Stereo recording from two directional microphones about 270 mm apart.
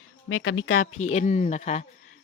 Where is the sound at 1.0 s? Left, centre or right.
Left.